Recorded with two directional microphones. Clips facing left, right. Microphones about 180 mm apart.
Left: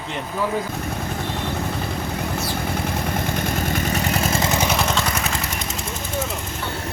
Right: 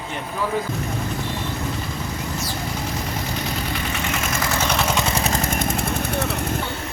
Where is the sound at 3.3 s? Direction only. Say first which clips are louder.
Left 3 dB; 50° left (ahead or behind); by 4.7 s 20° left (ahead or behind).